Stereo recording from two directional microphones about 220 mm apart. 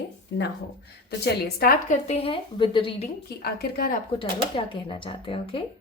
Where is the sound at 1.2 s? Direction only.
45° left (ahead or behind).